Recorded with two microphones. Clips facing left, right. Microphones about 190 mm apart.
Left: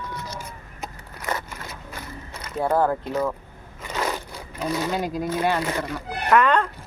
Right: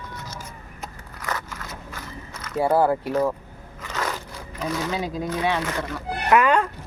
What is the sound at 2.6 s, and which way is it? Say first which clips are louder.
Speech: right 2 dB; 10° right (ahead or behind).